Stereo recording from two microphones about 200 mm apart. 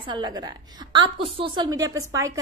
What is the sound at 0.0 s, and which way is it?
A woman's voice, 20° right (ahead or behind).